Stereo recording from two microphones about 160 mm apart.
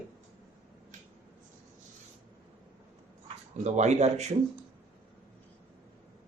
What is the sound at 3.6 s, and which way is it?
Speech, 45° right (ahead or behind).